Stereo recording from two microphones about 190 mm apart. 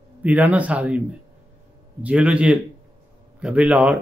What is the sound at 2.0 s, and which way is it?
A man's voice, 5° right (ahead or behind).